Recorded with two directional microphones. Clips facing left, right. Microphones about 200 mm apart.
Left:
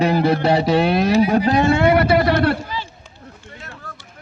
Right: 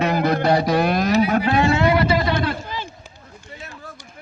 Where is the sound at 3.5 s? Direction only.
15° right (ahead or behind).